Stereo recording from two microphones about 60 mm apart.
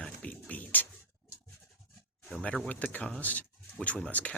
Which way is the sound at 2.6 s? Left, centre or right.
Left.